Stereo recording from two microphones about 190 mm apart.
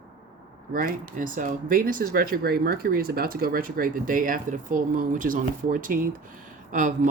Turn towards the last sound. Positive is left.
turn(degrees=-40)  # may be behind; listen again after turning